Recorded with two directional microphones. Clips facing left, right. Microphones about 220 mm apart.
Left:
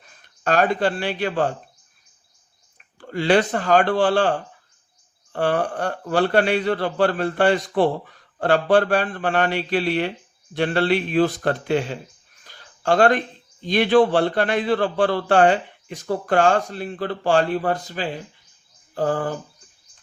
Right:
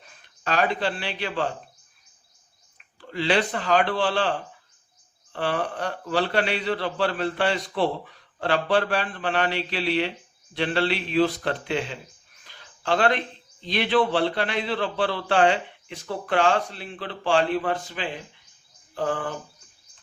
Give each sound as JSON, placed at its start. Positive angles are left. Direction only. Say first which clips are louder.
{"t": 0.4, "sound": "a man's voice", "louder": "left 5 dB", "side_deg": 50}
{"t": 3.0, "sound": "a man's voice", "louder": "left 5 dB", "side_deg": 50}
{"t": 12.5, "sound": "a sound", "louder": "left 5 dB", "side_deg": 45}
{"t": 13.7, "sound": "a man's voice", "louder": "left 6 dB", "side_deg": 45}
{"t": 18.9, "sound": "bird", "louder": "left 5 dB", "side_deg": 40}